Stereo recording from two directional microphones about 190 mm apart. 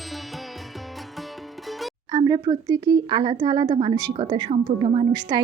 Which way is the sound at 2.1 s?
20° right (ahead or behind).